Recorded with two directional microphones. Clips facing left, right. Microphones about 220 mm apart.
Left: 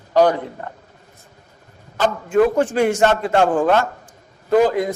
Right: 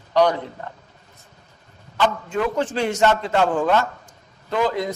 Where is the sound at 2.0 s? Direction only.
45° left (ahead or behind).